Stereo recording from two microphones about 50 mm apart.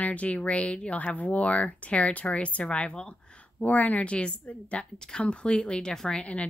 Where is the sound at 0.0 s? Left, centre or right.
Left.